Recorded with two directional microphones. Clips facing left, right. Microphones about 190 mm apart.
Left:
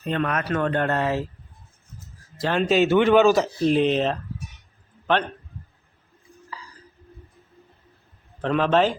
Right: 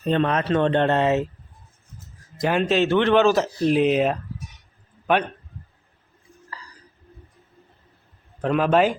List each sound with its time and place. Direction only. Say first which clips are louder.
0.0 s speech: right 4 dB; 30° right (ahead or behind)
2.6 s speech: left 2 dB; 5° left (ahead or behind)
8.4 s a man's voice: right 1 dB; 5° right (ahead or behind)